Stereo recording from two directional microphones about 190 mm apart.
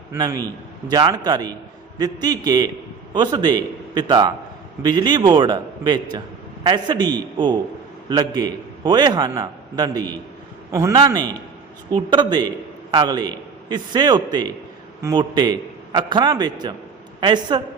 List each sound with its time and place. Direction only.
0.1 s a man's voice: 20° right (ahead or behind)